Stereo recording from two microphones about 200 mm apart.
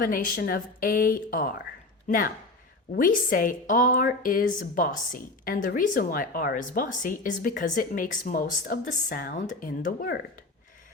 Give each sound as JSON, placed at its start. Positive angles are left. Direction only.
{"t": 0.0, "sound": "a woman's voice", "side_deg": 45}